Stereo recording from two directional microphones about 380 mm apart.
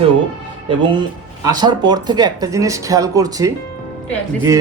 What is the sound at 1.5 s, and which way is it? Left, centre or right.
Speech, centre.